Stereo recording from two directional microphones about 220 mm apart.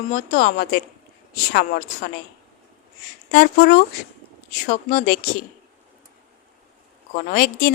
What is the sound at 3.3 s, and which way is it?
Speech, 40° left (ahead or behind).